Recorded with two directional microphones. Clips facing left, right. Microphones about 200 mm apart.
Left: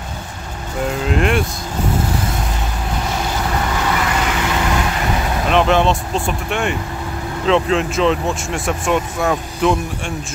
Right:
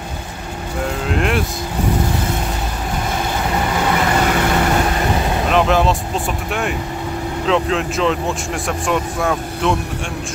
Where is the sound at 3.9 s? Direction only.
40° right (ahead or behind).